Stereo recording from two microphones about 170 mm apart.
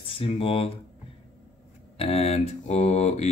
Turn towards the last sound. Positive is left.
turn(degrees=40)  # may be behind; listen again after turning